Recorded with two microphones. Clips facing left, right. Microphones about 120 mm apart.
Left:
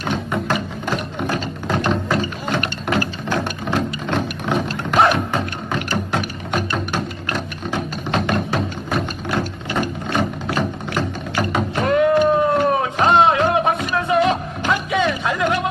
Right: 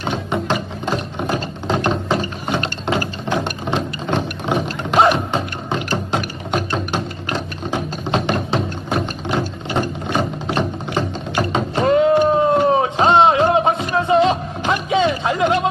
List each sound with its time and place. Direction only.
0.0 s music: 20° right (ahead or behind)
0.9 s ratchet: 20° right (ahead or behind)
10.1 s music: 20° right (ahead or behind)